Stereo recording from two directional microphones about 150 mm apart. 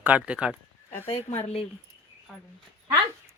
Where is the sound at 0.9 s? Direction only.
15° left (ahead or behind).